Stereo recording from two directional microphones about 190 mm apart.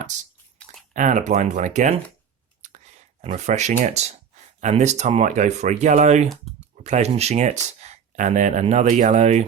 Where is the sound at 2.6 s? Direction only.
40° right (ahead or behind).